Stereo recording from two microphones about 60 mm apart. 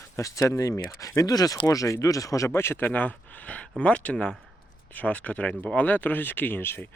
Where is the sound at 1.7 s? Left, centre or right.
Left.